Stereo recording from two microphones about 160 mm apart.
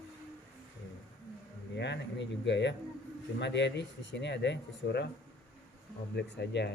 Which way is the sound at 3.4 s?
90° left.